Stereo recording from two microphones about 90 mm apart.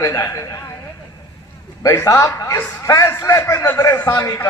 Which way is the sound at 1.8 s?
35° left (ahead or behind).